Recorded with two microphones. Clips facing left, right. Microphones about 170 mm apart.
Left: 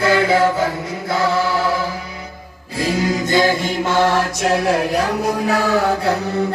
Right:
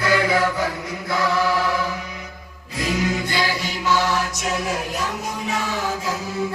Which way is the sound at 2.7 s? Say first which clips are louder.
Left 4 dB; 30° left (ahead or behind).